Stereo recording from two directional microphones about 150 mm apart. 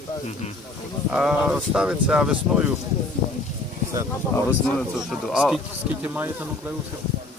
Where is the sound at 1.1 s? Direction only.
5° right (ahead or behind).